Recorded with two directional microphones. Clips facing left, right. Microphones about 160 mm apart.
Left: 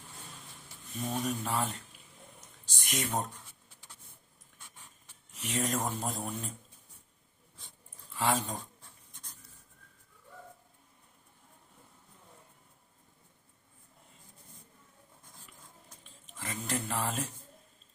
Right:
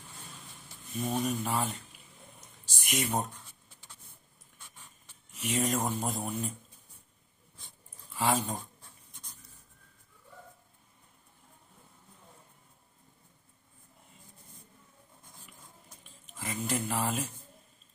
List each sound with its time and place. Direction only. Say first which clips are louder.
0.9 s speech: right 3 dB; centre (ahead or behind)
2.4 s a sound: right 1 dB; 5° right (ahead or behind)
5.3 s speech: right 3 dB; centre (ahead or behind)
8.1 s speech: right 1 dB; centre (ahead or behind)
16.0 s speech: right 2 dB; 5° right (ahead or behind)